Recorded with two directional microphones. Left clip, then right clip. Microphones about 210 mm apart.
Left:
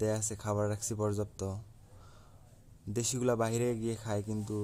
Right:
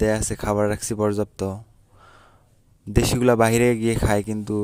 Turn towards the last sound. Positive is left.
turn(degrees=-40)  # may be behind; listen again after turning